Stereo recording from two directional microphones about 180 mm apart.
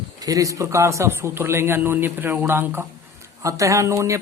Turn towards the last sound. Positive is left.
turn(degrees=-15)  # may be behind; listen again after turning